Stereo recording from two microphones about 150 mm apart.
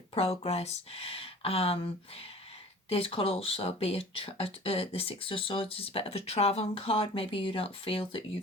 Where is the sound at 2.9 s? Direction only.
40° left (ahead or behind).